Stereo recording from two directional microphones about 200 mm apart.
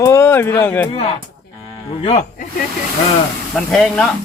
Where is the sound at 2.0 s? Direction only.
30° left (ahead or behind).